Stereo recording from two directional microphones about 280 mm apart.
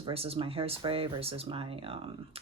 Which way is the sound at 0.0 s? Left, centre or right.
Right.